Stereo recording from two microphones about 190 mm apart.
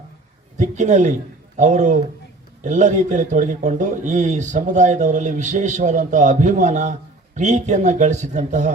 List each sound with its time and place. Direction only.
0.6 s a man's voice: 40° right (ahead or behind)